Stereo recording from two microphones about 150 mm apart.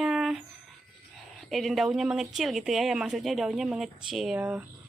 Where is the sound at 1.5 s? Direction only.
Centre (ahead or behind).